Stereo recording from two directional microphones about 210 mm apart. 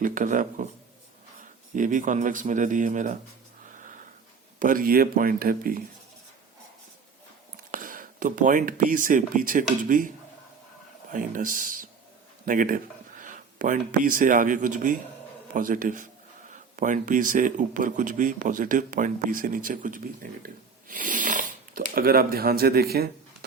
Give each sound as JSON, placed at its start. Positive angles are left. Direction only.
{"t": 0.0, "sound": "speech", "side_deg": -40}
{"t": 1.7, "sound": "speech", "side_deg": -40}
{"t": 4.6, "sound": "speech", "side_deg": -40}
{"t": 7.7, "sound": "speech", "side_deg": -40}
{"t": 11.1, "sound": "speech", "side_deg": -40}